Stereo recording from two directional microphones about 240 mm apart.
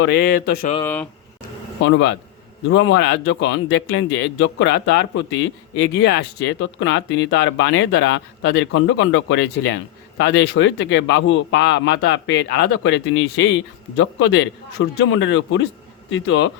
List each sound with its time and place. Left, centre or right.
0.0 s mantra: left
1.8 s speech: left